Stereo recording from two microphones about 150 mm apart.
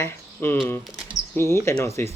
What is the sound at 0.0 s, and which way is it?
Speech, 15° left (ahead or behind).